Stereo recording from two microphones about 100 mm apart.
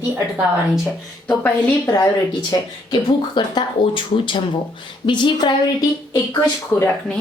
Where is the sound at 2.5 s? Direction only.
50° left (ahead or behind).